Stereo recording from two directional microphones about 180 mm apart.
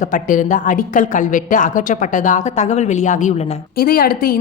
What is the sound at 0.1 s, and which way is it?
A woman's voice, 45° left (ahead or behind).